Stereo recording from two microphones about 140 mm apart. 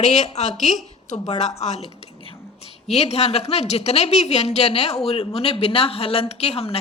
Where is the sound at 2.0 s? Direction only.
45° left (ahead or behind).